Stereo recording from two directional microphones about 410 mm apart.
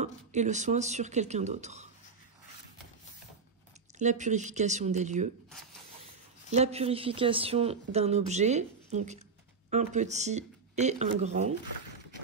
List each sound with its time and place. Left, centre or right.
0.0 s speech: centre
4.0 s speech: centre
6.5 s speech: centre